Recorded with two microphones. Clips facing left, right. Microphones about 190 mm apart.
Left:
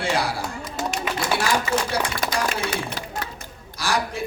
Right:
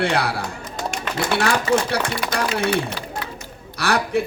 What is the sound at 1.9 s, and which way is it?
Speech, 60° right (ahead or behind).